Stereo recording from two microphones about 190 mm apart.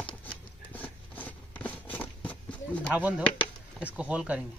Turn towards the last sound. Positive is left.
turn(degrees=-5)  # may be behind; listen again after turning